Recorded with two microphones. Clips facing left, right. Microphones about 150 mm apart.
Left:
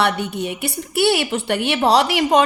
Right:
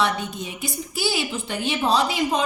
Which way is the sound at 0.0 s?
65° left (ahead or behind).